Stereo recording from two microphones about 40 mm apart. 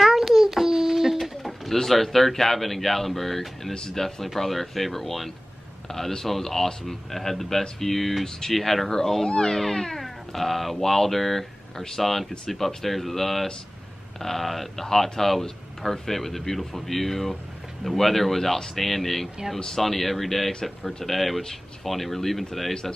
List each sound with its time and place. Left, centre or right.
0.0 s child singing: centre
1.1 s bird: centre
1.8 s speech: centre